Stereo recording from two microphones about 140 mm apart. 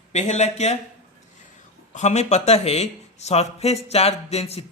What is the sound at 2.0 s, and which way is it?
Speech, 55° left (ahead or behind).